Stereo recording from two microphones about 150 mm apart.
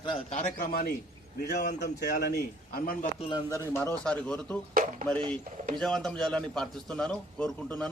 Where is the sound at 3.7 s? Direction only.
15° left (ahead or behind).